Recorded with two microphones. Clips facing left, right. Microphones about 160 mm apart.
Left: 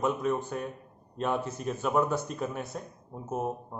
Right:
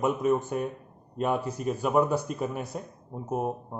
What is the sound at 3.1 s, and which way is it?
Speech, 20° right (ahead or behind).